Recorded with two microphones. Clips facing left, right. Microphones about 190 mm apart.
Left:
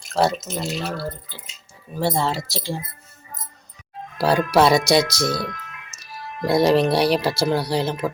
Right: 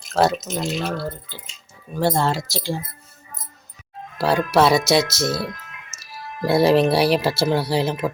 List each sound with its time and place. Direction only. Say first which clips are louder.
0.1 s speech: right 2 dB; centre (ahead or behind)
4.2 s speech: even; centre (ahead or behind)
6.4 s speech: right 1 dB; 5° right (ahead or behind)